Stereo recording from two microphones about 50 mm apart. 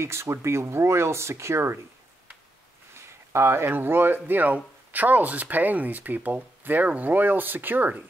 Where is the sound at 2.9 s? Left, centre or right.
Right.